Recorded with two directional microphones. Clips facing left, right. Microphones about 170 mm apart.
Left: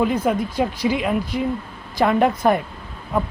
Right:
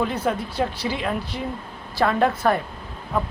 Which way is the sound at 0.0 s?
10° left (ahead or behind).